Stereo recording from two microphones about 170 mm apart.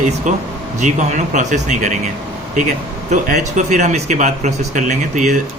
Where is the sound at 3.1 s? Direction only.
45° right (ahead or behind).